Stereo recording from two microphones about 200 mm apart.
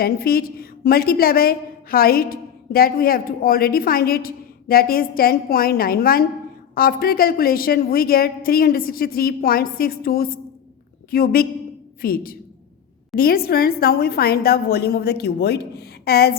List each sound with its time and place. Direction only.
0.0 s a woman's voice: 50° left (ahead or behind)